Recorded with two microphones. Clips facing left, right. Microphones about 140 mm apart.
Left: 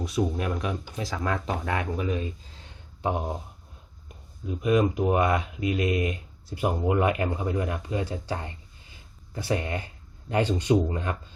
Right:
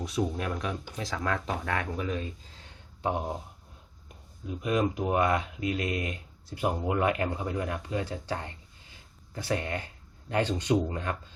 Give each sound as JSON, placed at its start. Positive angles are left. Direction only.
{"t": 0.0, "sound": "speech", "side_deg": 5}
{"t": 4.6, "sound": "speech", "side_deg": 15}